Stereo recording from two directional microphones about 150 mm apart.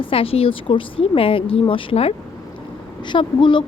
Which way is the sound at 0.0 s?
35° left (ahead or behind).